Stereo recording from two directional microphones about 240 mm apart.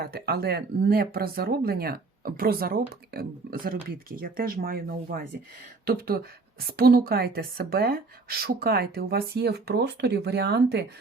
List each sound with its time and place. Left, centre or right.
0.0 s speech: right